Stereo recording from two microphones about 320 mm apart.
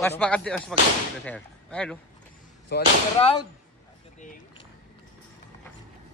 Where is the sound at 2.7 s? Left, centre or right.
Left.